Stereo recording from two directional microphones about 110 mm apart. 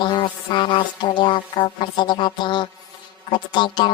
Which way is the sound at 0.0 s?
45° left (ahead or behind).